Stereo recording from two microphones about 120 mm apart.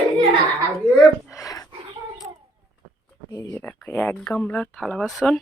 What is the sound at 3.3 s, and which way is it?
Speech, 30° left (ahead or behind).